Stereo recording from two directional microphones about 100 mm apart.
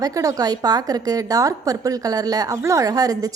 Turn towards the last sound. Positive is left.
turn(degrees=-40)  # may be behind; listen again after turning